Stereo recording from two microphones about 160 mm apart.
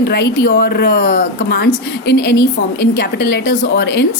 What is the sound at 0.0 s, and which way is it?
Speech, 90° left.